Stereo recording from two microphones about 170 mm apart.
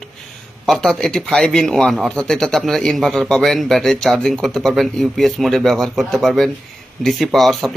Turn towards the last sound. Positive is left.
turn(degrees=0)  # may be behind; listen again after turning